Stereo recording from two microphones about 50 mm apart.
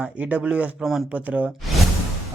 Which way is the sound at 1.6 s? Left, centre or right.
Centre.